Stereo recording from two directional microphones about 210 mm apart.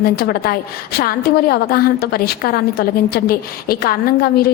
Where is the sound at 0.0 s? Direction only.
50° left (ahead or behind).